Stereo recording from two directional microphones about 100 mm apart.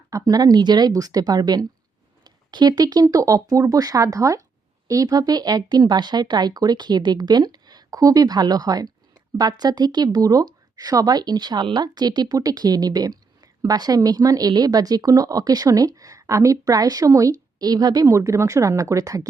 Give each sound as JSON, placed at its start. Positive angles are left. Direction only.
{"t": 0.1, "sound": "speech", "side_deg": -40}